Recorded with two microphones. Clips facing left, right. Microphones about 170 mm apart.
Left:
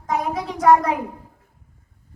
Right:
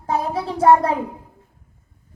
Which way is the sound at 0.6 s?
30° right (ahead or behind).